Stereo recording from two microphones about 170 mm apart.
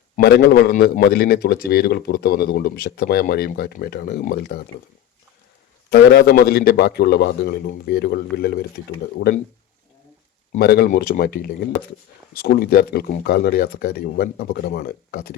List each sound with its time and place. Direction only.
0.2 s a man's voice: 70° left (ahead or behind)
5.9 s a man's voice: 75° left (ahead or behind)
10.6 s speech: 65° left (ahead or behind)